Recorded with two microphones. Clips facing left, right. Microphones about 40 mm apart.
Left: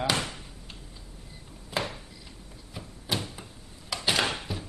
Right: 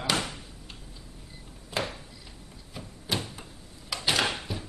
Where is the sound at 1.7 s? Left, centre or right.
Centre.